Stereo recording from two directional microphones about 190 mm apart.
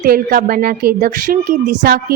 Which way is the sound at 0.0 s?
50° right (ahead or behind).